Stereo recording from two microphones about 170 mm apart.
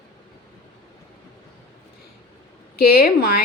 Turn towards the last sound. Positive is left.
turn(degrees=60)  # may be behind; listen again after turning